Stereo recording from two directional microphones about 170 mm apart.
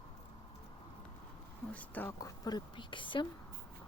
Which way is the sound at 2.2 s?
25° left (ahead or behind).